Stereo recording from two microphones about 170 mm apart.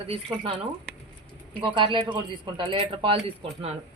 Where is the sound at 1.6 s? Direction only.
30° right (ahead or behind).